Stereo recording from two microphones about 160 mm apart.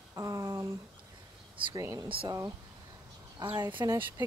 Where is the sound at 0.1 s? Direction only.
20° right (ahead or behind).